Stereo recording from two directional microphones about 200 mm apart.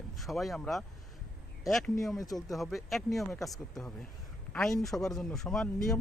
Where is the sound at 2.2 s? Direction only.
20° left (ahead or behind).